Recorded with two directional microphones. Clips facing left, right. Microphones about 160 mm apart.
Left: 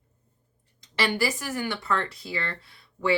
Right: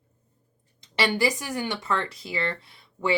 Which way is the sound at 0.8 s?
20° right (ahead or behind).